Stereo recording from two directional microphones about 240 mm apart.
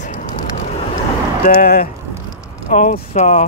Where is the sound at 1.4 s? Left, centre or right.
Left.